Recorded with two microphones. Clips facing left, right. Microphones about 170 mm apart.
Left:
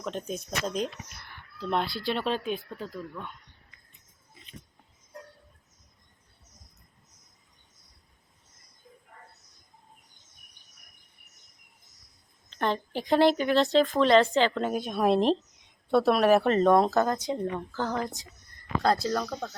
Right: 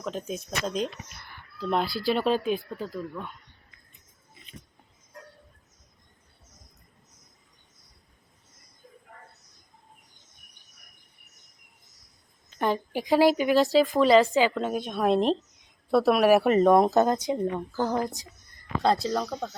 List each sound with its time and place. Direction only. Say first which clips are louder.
0.0 s speech: right 1 dB; centre (ahead or behind)
10.2 s cricket: right 2 dB; centre (ahead or behind)
12.5 s speech: right 2 dB; 5° right (ahead or behind)
16.7 s speech: right 3 dB; 20° right (ahead or behind)
18.9 s speech: right 1 dB; centre (ahead or behind)